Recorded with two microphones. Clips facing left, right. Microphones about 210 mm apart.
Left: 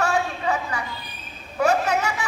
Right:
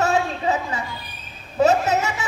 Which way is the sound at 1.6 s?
25° right (ahead or behind).